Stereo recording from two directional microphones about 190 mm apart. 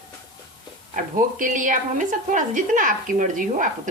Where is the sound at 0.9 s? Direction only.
45° right (ahead or behind).